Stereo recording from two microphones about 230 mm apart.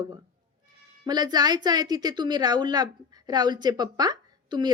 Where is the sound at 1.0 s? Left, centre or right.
Centre.